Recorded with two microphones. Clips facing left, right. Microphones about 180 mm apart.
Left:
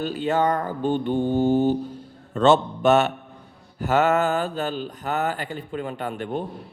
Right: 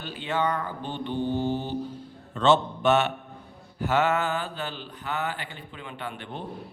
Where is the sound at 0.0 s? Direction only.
40° left (ahead or behind).